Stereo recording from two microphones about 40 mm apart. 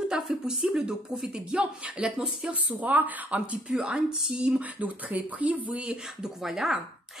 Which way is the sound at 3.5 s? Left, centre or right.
Right.